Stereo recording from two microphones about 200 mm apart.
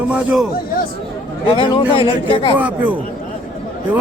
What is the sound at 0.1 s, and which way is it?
Speech, 5° right (ahead or behind).